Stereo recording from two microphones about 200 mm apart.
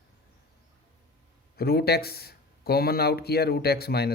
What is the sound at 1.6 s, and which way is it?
Speech, 50° left (ahead or behind).